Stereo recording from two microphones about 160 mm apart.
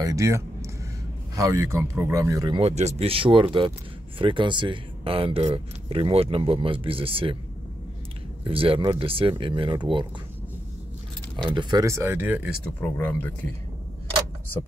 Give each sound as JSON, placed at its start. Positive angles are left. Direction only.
{"t": 0.0, "sound": "speech", "side_deg": -20}
{"t": 2.6, "sound": "speech", "side_deg": -45}
{"t": 8.5, "sound": "speech", "side_deg": -35}
{"t": 11.4, "sound": "speech", "side_deg": -30}
{"t": 11.8, "sound": "speech", "side_deg": -15}
{"t": 12.8, "sound": "speech", "side_deg": 10}